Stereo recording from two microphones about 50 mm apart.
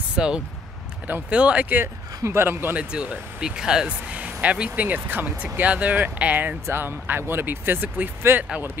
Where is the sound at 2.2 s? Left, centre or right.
Right.